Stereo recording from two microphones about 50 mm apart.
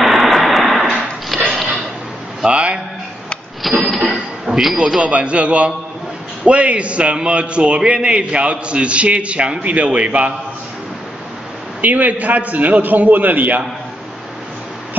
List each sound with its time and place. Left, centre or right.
0.0 s vehicle: centre
1.3 s sniff: centre
2.4 s a sound: right
3.8 s a sound: centre
4.7 s a man's voice: right
11.8 s a man's voice: right